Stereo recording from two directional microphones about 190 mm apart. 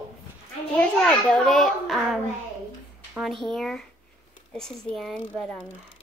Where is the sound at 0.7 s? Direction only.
5° left (ahead or behind).